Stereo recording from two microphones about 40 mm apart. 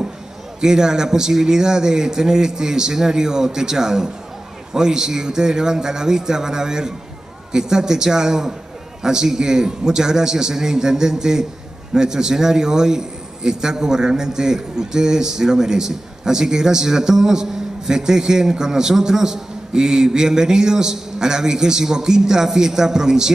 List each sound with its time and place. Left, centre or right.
0.6 s a man's voice: centre